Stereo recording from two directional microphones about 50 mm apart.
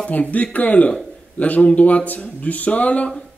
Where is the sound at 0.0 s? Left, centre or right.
Left.